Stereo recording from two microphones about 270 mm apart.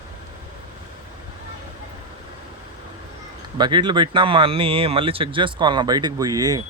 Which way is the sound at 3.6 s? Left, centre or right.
Centre.